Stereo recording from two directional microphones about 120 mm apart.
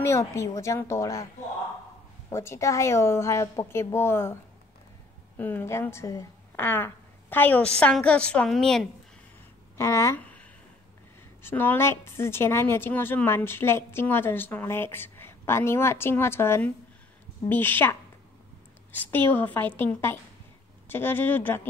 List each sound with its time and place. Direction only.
0.0 s a woman's voice: 25° left (ahead or behind)
5.4 s a woman's voice: 15° left (ahead or behind)
9.8 s a woman's voice: 25° left (ahead or behind)
11.4 s a woman's voice: 15° left (ahead or behind)